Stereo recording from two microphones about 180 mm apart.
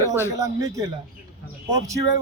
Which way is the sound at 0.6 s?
20° right (ahead or behind).